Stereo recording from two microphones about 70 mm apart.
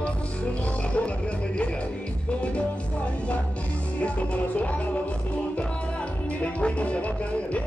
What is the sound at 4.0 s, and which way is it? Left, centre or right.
Music, centre.